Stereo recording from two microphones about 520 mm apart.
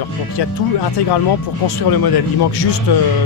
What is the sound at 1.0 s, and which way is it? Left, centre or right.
Speech, left.